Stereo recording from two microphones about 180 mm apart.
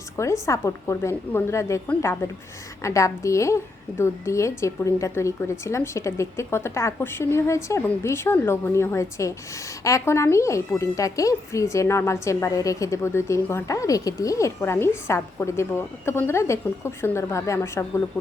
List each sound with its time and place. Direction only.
0.4 s speech: 15° left (ahead or behind)